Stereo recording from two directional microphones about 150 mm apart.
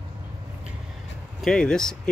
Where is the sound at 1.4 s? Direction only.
5° left (ahead or behind).